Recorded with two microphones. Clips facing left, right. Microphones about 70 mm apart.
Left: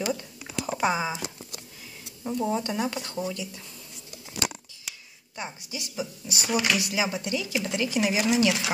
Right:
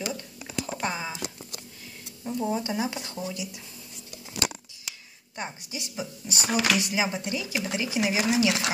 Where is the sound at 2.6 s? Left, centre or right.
Centre.